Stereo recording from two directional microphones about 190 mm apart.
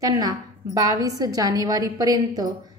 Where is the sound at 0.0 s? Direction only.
20° right (ahead or behind).